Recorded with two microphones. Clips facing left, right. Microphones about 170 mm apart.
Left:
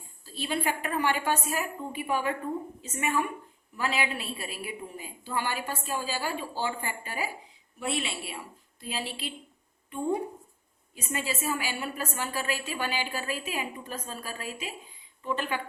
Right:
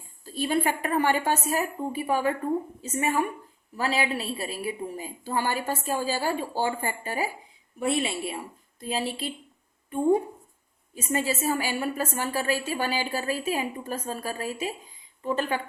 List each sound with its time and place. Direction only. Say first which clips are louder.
0.3 s a woman's voice: right 5 dB; 50° right (ahead or behind)
10.9 s a woman's voice: right 6 dB; 40° right (ahead or behind)